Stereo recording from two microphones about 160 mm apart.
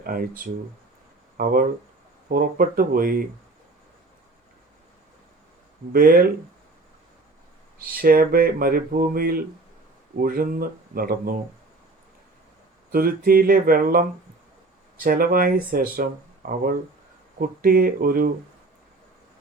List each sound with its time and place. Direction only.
0.0 s speech: 60° right (ahead or behind)
2.3 s speech: 65° right (ahead or behind)
5.9 s speech: 65° right (ahead or behind)
7.9 s speech: 65° right (ahead or behind)
12.9 s speech: 65° right (ahead or behind)